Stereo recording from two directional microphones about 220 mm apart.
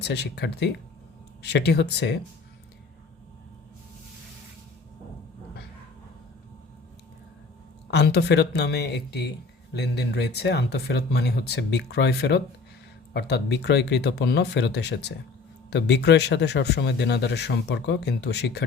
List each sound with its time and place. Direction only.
0.0 s speech: 50° left (ahead or behind)
7.9 s speech: 50° left (ahead or behind)